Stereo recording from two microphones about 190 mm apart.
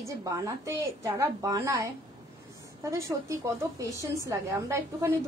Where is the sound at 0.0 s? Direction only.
15° right (ahead or behind).